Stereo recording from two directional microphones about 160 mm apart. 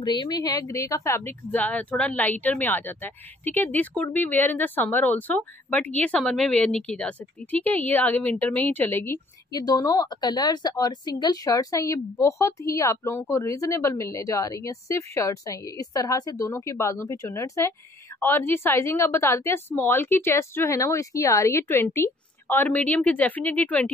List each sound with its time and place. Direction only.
0.0 s speech: 25° left (ahead or behind); by 23.9 s 10° left (ahead or behind)